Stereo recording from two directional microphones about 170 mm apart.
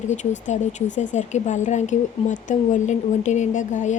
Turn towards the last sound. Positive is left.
turn(degrees=45)  # may be behind; listen again after turning